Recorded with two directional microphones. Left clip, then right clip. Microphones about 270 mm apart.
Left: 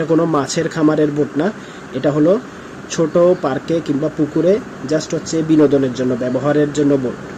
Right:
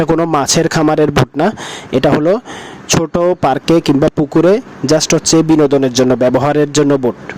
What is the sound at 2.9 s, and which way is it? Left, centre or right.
Speech, right.